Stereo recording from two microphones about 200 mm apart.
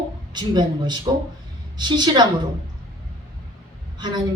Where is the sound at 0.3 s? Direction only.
20° right (ahead or behind).